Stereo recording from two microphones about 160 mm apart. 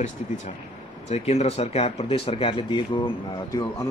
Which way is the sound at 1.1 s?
45° left (ahead or behind).